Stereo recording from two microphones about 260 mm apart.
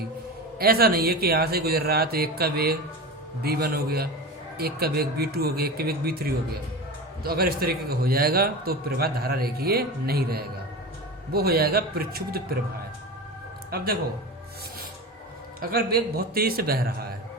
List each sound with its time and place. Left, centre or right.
0.6 s a man's voice: right
13.7 s speech: right
15.6 s a man's voice: right